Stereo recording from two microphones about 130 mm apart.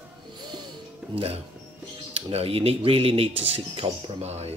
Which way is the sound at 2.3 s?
50° right (ahead or behind).